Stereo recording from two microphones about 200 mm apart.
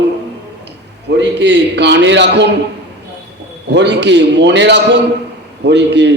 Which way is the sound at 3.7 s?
60° right (ahead or behind).